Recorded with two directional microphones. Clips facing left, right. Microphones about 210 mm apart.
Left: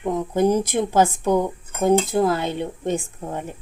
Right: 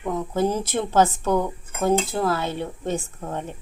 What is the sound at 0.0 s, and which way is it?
A woman's voice, 15° left (ahead or behind).